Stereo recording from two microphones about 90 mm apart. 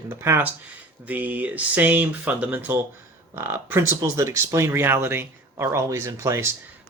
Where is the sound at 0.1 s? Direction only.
25° right (ahead or behind).